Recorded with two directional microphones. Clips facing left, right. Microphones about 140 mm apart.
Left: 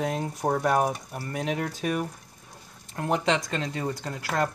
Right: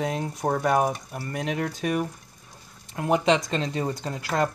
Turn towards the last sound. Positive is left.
turn(degrees=-25)  # may be behind; listen again after turning